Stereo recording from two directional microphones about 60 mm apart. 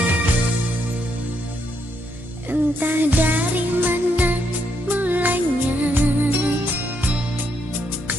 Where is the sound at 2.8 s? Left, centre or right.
Right.